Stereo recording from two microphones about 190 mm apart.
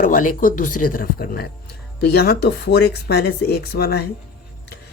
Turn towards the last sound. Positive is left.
turn(degrees=55)  # may be behind; listen again after turning